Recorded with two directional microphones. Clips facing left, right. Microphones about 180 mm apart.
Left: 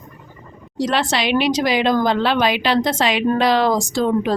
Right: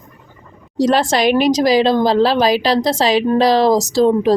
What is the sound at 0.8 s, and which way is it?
A woman's voice, 40° right (ahead or behind).